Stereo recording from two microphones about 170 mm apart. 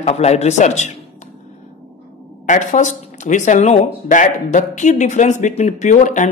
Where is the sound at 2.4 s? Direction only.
45° left (ahead or behind).